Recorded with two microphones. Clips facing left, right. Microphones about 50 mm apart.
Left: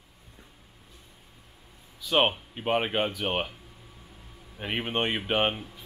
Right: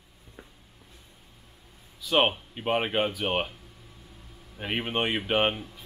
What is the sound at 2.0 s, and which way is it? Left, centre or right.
Speech, centre.